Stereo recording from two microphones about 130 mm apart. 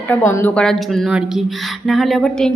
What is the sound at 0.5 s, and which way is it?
A woman's voice, 5° left (ahead or behind).